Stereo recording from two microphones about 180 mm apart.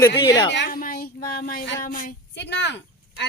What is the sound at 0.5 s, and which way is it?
Speech, 60° left (ahead or behind).